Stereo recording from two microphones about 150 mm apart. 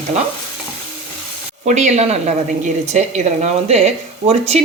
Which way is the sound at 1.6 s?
50° right (ahead or behind).